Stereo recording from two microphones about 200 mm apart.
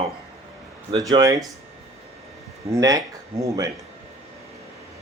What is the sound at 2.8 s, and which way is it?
Speech, 20° right (ahead or behind).